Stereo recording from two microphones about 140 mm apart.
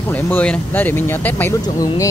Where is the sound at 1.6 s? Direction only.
30° left (ahead or behind).